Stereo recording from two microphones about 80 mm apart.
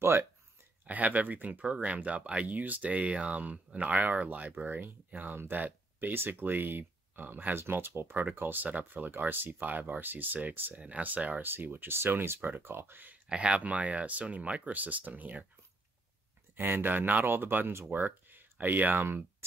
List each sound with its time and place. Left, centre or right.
0.0 s speech: right
0.8 s speech: centre
13.3 s speech: centre
16.5 s speech: right